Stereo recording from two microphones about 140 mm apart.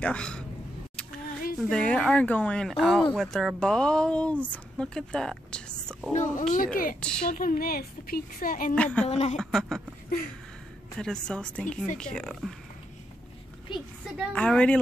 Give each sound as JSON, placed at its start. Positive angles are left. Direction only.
{"t": 0.0, "sound": "speech", "side_deg": 5}
{"t": 1.6, "sound": "a woman's voice", "side_deg": 5}
{"t": 6.1, "sound": "a child's voice", "side_deg": 65}
{"t": 6.5, "sound": "speech", "side_deg": 85}
{"t": 7.0, "sound": "a woman's voice", "side_deg": 5}
{"t": 7.2, "sound": "a woman's voice", "side_deg": 85}
{"t": 8.7, "sound": "a woman's voice", "side_deg": 10}
{"t": 9.0, "sound": "a woman's voice", "side_deg": 50}
{"t": 9.4, "sound": "speech", "side_deg": 0}
{"t": 11.0, "sound": "a woman's voice", "side_deg": 5}
{"t": 13.7, "sound": "a woman's voice", "side_deg": 35}
{"t": 14.3, "sound": "a woman's voice", "side_deg": 10}